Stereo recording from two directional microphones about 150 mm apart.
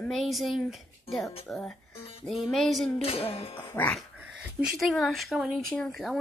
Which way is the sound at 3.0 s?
40° left (ahead or behind).